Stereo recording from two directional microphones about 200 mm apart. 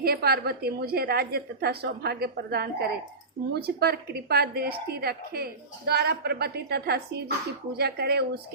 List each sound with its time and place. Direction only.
0.0 s a woman's voice: 50° right (ahead or behind)